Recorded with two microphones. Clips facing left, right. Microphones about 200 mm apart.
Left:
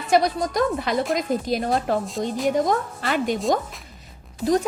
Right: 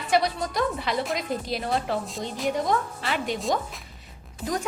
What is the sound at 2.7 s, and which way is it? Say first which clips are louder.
Speech: left 3 dB; 45° left (ahead or behind).